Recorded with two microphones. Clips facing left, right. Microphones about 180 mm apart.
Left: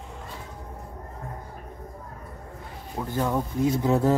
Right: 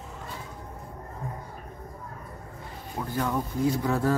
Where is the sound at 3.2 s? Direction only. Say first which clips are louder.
Left 2 dB; 20° left (ahead or behind).